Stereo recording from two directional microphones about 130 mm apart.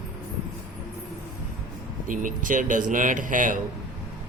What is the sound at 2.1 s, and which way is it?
A man's voice, 90° right.